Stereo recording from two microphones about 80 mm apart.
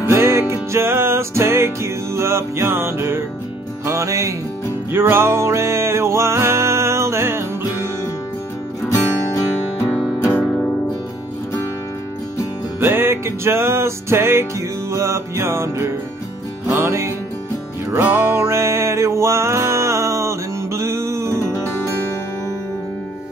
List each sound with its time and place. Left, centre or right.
0.1 s music: right
8.8 s music: left
12.8 s music: right